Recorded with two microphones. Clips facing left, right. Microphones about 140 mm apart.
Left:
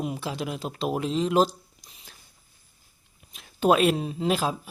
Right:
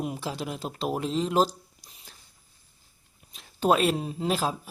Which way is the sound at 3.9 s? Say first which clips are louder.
Left 2 dB; centre (ahead or behind).